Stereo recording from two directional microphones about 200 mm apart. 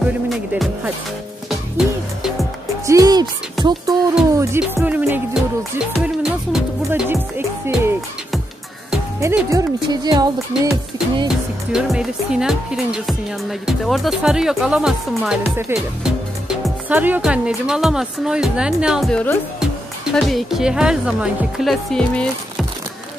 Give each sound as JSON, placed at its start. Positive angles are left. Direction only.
{"t": 0.0, "sound": "speech", "side_deg": -5}
{"t": 2.9, "sound": "music", "side_deg": -20}
{"t": 4.4, "sound": "music", "side_deg": -15}
{"t": 9.2, "sound": "speech", "side_deg": -15}
{"t": 10.6, "sound": "speech", "side_deg": -5}